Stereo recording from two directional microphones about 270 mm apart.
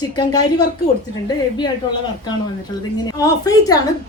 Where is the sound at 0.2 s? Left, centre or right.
Centre.